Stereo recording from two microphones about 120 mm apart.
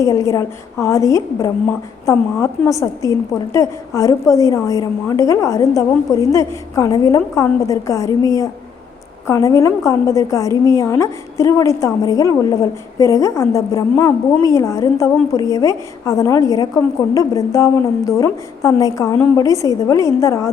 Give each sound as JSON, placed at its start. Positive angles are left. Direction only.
{"t": 0.0, "sound": "a woman's voice", "side_deg": 25}